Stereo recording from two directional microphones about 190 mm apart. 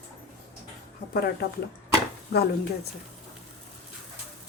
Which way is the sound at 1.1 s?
55° left (ahead or behind).